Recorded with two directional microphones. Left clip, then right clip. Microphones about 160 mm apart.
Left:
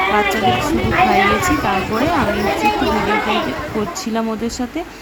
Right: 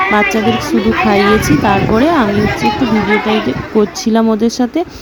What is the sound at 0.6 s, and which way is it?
Speech, 25° right (ahead or behind).